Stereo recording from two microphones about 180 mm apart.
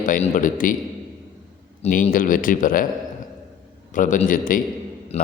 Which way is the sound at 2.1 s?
50° left (ahead or behind).